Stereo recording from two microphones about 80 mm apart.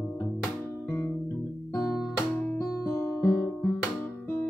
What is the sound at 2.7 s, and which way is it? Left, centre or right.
Guitar, left.